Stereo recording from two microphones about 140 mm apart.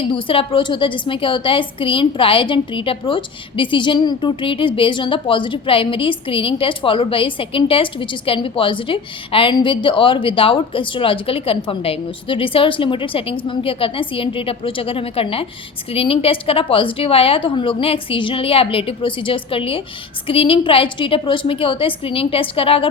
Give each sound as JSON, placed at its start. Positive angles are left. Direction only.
{"t": 0.0, "sound": "a woman's voice", "side_deg": 40}